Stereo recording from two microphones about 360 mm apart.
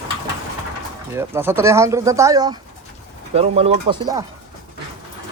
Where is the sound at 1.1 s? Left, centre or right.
Centre.